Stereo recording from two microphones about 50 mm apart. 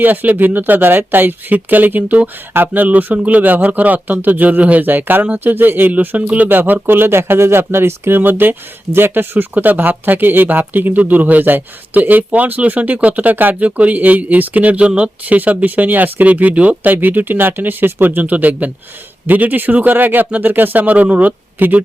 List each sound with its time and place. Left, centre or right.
0.0 s speech: right
8.2 s speech: right
13.7 s speech: right
15.4 s speech: right